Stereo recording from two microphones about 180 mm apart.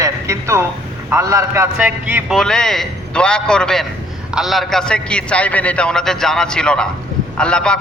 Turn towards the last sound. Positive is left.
turn(degrees=5)  # may be behind; listen again after turning